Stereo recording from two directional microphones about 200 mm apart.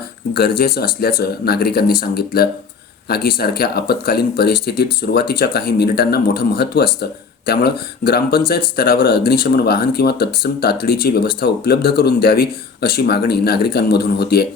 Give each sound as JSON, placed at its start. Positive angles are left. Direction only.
{"t": 0.3, "sound": "speech", "side_deg": 50}